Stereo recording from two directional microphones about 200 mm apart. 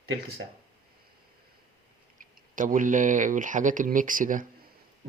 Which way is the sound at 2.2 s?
40° right (ahead or behind).